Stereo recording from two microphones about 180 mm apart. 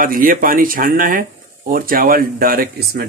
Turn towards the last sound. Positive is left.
turn(degrees=-55)  # may be behind; listen again after turning